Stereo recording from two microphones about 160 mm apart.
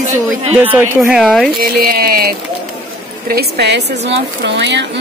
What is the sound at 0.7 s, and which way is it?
Speech, 10° right (ahead or behind).